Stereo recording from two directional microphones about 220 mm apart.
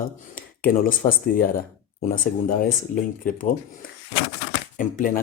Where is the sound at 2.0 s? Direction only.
40° left (ahead or behind).